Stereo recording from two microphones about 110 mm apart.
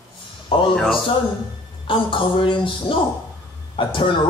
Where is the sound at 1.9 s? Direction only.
50° left (ahead or behind).